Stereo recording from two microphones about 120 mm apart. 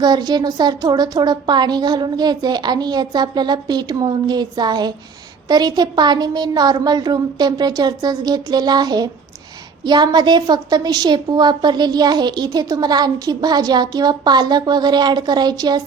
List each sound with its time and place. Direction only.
0.0 s a woman's voice: 35° right (ahead or behind)